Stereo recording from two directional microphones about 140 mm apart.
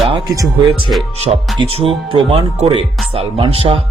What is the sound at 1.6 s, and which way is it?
Speech, 40° right (ahead or behind).